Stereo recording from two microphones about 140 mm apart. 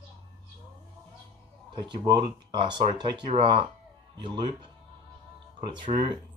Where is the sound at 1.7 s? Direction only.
30° right (ahead or behind).